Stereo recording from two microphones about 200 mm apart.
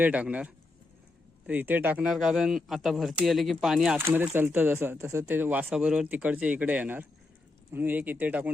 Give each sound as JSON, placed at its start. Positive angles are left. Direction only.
{"t": 0.0, "sound": "speech", "side_deg": -5}